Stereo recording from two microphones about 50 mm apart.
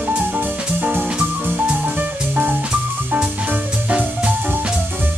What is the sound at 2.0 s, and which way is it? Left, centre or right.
Music, right.